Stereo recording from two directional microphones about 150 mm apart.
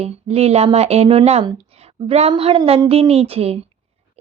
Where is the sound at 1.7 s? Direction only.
40° right (ahead or behind).